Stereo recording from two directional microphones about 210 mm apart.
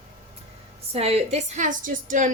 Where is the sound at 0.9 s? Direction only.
30° right (ahead or behind).